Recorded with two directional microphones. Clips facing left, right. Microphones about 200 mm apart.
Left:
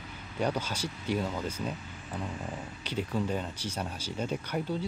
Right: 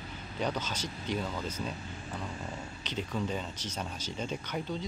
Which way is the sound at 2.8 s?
10° left (ahead or behind).